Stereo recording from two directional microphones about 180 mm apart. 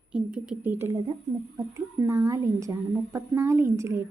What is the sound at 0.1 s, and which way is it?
Speech, 5° right (ahead or behind).